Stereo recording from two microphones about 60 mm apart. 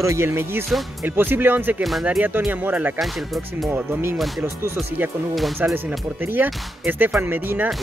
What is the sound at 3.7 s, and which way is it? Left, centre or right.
Speech, right.